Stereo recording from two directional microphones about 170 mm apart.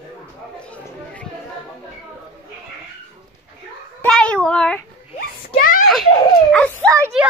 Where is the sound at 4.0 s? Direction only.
5° left (ahead or behind).